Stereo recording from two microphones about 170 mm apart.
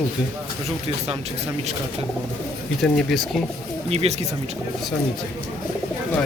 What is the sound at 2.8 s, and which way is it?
Speech, centre (ahead or behind).